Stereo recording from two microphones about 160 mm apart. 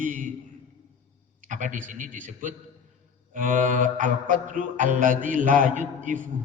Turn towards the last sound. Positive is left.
turn(degrees=-55)  # may be behind; listen again after turning